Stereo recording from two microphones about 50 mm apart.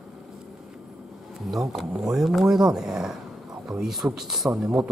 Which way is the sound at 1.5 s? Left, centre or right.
Centre.